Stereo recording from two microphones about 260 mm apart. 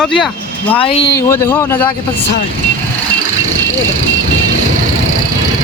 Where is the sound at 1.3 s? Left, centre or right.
Centre.